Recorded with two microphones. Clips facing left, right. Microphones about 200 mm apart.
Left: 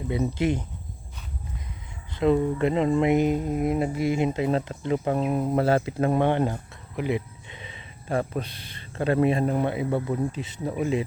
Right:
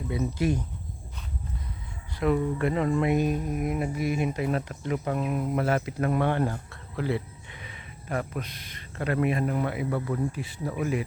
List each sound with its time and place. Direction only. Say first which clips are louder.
0.1 s speech: left 2 dB; 25° left (ahead or behind)
2.1 s speech: left 4 dB; 25° left (ahead or behind)